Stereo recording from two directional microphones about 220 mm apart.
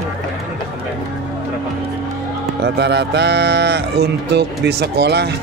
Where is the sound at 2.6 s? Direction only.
50° right (ahead or behind).